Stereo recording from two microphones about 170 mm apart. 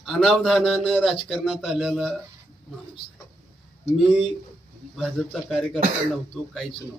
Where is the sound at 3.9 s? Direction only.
5° right (ahead or behind).